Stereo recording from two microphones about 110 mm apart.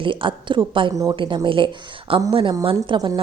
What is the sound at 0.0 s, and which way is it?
A woman's voice, 50° right (ahead or behind).